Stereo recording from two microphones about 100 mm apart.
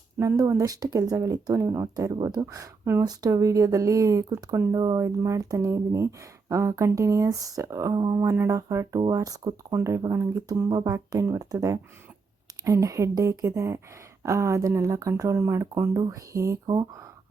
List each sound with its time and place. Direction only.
0.2 s speech: 35° right (ahead or behind)
3.0 s speech: 40° right (ahead or behind)
4.7 s speech: 45° right (ahead or behind)
4.9 s speech: 30° right (ahead or behind)
10.7 s speech: 40° right (ahead or behind)